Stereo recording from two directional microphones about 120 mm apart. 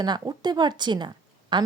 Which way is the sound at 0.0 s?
35° right (ahead or behind).